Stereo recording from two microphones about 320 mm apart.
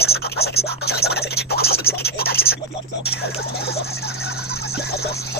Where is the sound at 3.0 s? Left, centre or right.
Left.